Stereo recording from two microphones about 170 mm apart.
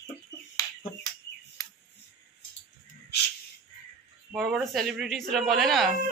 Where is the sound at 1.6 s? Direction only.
20° left (ahead or behind).